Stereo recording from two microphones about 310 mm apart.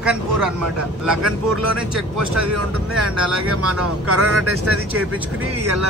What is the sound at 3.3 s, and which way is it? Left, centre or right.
Speech, right.